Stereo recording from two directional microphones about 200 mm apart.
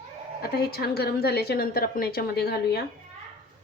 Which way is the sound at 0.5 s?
50° left (ahead or behind).